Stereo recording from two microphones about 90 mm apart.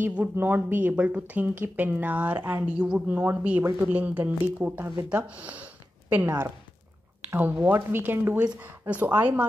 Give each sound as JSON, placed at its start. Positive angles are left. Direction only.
{"t": 0.0, "sound": "speech", "side_deg": -20}
{"t": 6.2, "sound": "speech", "side_deg": -35}
{"t": 7.2, "sound": "speech", "side_deg": -20}